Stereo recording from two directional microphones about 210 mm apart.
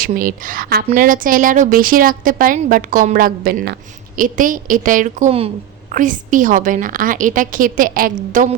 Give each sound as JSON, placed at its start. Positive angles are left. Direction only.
{"t": 0.0, "sound": "a woman's voice", "side_deg": -40}